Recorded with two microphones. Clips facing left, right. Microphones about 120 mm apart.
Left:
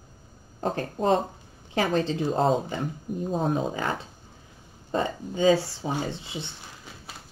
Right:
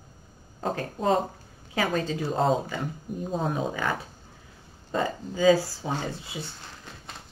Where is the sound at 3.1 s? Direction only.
Centre (ahead or behind).